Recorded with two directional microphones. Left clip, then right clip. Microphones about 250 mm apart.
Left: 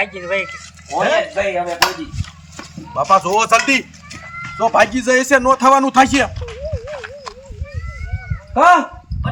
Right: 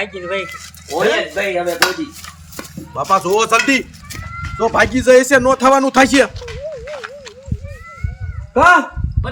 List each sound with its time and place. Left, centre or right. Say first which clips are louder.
0.2 s a man's voice: left 1 dB; centre
2.9 s a man's voice: left 1 dB; centre
8.5 s a man's voice: right 1 dB; centre